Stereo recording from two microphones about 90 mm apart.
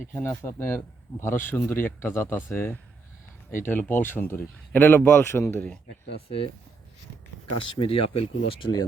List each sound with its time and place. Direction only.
0.1 s speech: 25° left (ahead or behind)
6.1 s speech: 90° left
7.8 s speech: 90° left